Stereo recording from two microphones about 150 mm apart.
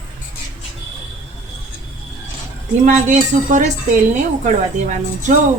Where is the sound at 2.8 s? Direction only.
55° right (ahead or behind).